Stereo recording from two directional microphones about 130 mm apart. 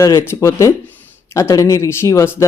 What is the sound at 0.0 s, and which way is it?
Speech, 20° left (ahead or behind).